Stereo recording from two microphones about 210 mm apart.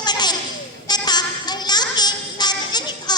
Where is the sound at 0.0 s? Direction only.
20° left (ahead or behind).